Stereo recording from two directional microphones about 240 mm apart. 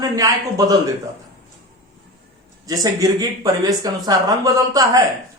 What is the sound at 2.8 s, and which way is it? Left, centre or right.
A woman's voice, centre.